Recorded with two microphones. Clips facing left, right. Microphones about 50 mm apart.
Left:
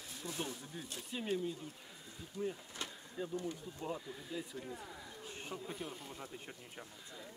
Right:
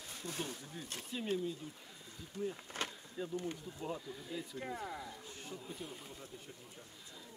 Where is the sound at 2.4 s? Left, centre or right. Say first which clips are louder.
Even; left.